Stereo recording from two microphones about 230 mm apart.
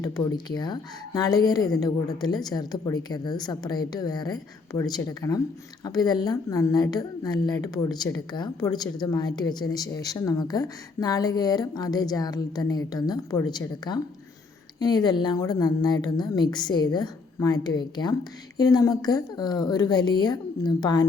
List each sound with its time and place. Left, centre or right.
0.0 s a woman's voice: centre